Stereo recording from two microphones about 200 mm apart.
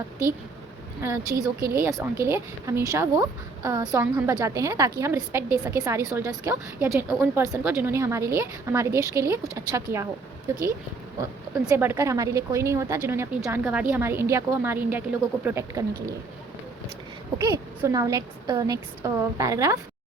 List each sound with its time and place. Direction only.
1.0 s a woman's voice: 15° right (ahead or behind)
11.2 s a woman's voice: 15° right (ahead or behind)
17.3 s a woman's voice: 15° right (ahead or behind)